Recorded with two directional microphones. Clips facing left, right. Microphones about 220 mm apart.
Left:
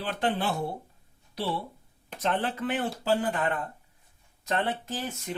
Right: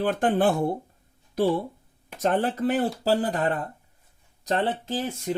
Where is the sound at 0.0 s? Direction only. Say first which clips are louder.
Right 7 dB; 50° right (ahead or behind); by 5.3 s 30° right (ahead or behind).